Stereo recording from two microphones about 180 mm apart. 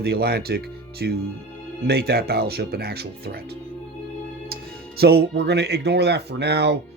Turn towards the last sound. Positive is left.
turn(degrees=-70)  # may be behind; listen again after turning